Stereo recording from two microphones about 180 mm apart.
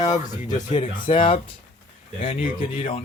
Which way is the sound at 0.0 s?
20° left (ahead or behind).